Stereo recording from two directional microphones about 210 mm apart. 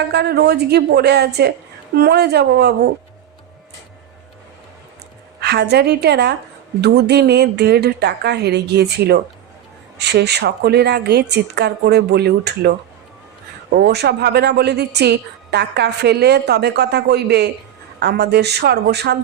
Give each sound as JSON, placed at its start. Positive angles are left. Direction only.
{"t": 0.1, "sound": "a woman's voice", "side_deg": -50}
{"t": 5.4, "sound": "a woman's voice", "side_deg": -50}
{"t": 13.7, "sound": "a woman's voice", "side_deg": -50}